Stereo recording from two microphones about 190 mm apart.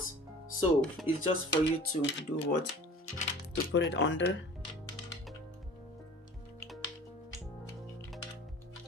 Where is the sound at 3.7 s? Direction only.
75° left (ahead or behind).